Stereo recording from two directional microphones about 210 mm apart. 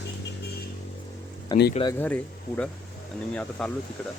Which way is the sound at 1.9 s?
10° left (ahead or behind).